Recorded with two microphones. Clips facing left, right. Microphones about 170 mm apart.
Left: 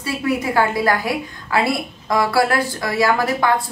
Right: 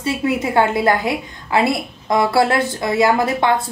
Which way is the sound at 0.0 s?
25° right (ahead or behind).